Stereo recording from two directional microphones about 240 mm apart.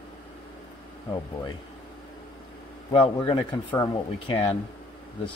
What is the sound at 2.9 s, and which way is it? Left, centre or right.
Speech, left.